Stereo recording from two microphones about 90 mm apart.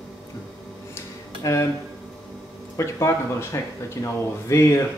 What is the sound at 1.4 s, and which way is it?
Speech, 35° left (ahead or behind).